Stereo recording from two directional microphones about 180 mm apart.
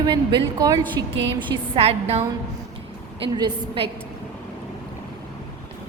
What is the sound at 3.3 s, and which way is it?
Speech, 25° right (ahead or behind).